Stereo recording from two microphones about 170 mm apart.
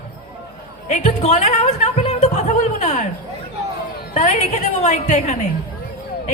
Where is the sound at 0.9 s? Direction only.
45° left (ahead or behind).